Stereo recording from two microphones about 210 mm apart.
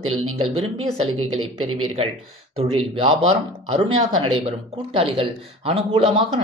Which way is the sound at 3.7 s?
25° right (ahead or behind).